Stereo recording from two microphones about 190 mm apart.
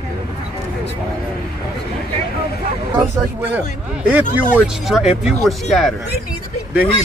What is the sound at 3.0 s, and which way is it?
Speech, 10° right (ahead or behind).